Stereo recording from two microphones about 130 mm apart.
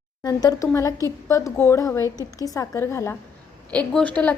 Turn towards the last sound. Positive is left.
turn(degrees=10)  # may be behind; listen again after turning